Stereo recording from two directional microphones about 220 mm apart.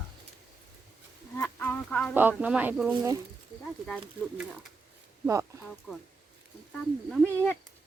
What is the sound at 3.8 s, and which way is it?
Speech, centre (ahead or behind).